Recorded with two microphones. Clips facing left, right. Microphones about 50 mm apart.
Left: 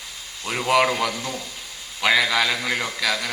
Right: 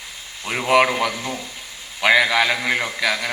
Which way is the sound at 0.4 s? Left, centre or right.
Right.